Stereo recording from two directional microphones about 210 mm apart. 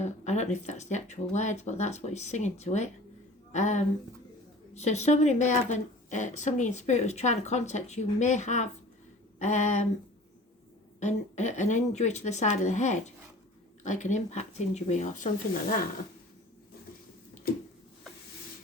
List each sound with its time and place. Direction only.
0.0 s a woman's voice: 35° left (ahead or behind)
11.0 s a woman's voice: 35° left (ahead or behind)